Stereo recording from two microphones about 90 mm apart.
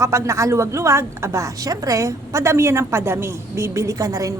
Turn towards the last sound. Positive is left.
turn(degrees=-40)  # may be behind; listen again after turning